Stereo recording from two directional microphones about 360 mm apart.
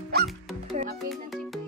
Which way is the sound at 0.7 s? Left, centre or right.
Centre.